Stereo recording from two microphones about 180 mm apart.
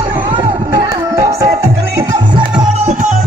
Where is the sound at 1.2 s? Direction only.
15° right (ahead or behind).